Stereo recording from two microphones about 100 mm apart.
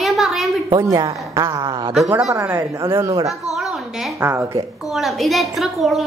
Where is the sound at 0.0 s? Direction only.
Centre (ahead or behind).